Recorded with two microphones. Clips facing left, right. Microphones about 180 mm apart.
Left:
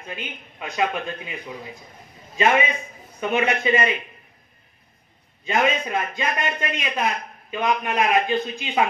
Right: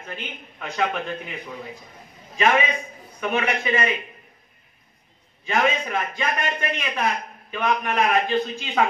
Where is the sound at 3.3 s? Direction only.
25° left (ahead or behind).